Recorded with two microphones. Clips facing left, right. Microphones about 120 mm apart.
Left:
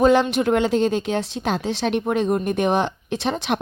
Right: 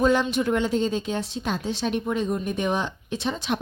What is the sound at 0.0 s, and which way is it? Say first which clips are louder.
Speech: left 5 dB; 80° left.